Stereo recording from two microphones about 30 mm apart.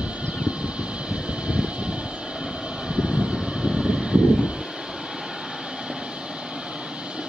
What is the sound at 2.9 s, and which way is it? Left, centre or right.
Vehicle, centre.